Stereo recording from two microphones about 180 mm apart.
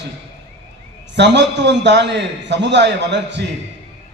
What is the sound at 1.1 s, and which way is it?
A man's voice, 75° right (ahead or behind).